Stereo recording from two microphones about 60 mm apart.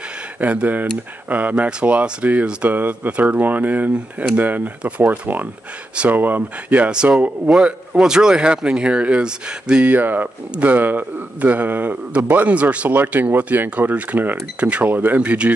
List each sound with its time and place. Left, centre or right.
0.4 s a man's voice: right
9.8 s a man's voice: right